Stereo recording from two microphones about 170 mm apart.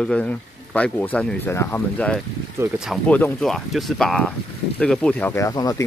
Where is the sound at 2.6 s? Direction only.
5° right (ahead or behind).